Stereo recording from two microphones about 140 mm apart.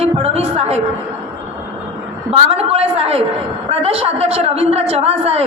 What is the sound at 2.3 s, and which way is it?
A woman's voice, 45° right (ahead or behind).